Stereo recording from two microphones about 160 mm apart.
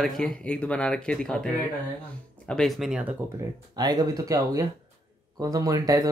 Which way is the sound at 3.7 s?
25° right (ahead or behind).